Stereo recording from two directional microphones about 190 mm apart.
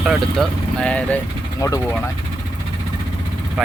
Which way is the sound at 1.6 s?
20° left (ahead or behind).